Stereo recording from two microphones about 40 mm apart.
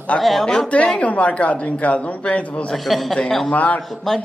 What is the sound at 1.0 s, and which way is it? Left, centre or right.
A man's voice, left.